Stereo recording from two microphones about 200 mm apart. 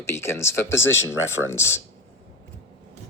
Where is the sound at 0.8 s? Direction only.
75° left (ahead or behind).